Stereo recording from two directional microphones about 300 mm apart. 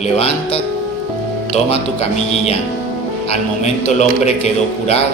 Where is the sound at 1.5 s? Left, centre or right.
Left.